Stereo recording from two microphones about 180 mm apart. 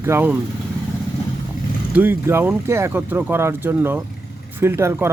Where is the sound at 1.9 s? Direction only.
10° right (ahead or behind).